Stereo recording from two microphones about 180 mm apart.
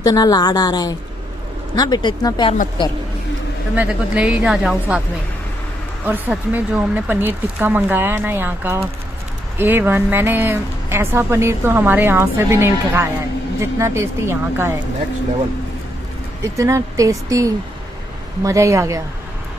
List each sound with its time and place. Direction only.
0.0 s a woman's voice: 20° left (ahead or behind)
3.7 s speech: 10° right (ahead or behind)
6.0 s speech: 10° right (ahead or behind)
16.5 s speech: 15° right (ahead or behind)